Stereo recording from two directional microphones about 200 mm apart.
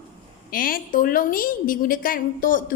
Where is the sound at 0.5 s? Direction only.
45° left (ahead or behind).